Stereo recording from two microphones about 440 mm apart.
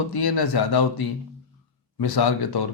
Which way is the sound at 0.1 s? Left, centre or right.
Left.